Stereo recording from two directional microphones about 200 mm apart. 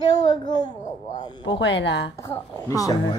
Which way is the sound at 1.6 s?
60° left (ahead or behind).